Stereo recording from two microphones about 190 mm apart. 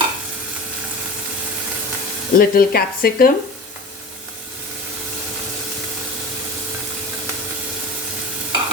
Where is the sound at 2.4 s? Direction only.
50° left (ahead or behind).